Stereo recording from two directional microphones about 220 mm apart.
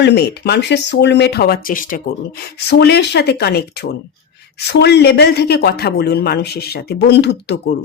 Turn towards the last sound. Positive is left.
turn(degrees=50)  # may be behind; listen again after turning